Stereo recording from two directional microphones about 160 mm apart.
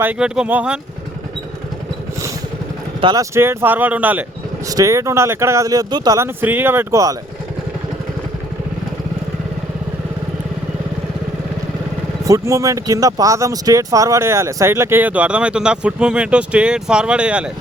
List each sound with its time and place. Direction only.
0.0 s speech: 10° right (ahead or behind)
3.0 s speech: 25° right (ahead or behind)
4.7 s speech: 20° right (ahead or behind)
12.2 s speech: 20° right (ahead or behind)